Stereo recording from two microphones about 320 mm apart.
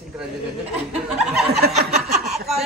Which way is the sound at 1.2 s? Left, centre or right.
Centre.